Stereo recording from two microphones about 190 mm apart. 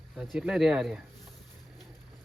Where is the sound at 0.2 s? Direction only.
5° right (ahead or behind).